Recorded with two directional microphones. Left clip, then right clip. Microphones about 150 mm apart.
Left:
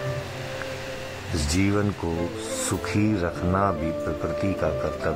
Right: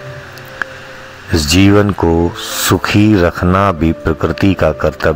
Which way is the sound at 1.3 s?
45° right (ahead or behind).